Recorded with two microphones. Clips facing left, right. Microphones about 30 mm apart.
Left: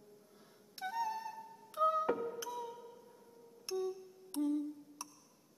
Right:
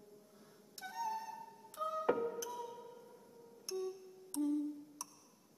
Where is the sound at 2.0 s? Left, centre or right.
Centre.